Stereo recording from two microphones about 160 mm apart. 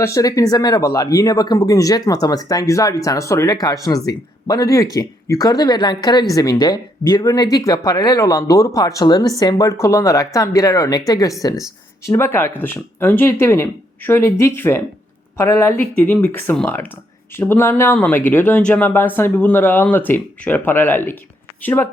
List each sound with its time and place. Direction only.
0.0 s speech: 20° left (ahead or behind)